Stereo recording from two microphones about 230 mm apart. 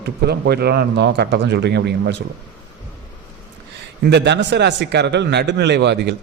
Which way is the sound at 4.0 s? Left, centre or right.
Right.